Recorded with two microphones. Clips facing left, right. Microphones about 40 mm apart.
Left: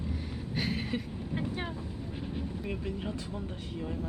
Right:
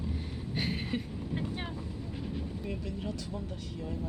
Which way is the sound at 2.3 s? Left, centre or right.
Left.